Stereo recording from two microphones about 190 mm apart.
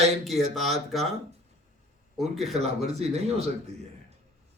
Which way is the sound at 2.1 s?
Centre (ahead or behind).